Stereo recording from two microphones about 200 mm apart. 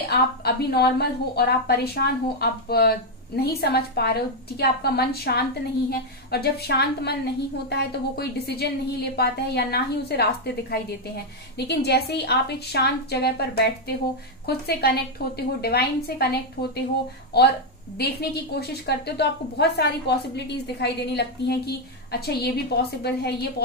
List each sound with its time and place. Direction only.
0.1 s a woman's voice: 55° left (ahead or behind)